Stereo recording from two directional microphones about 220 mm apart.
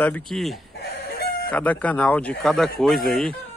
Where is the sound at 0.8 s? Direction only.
45° left (ahead or behind).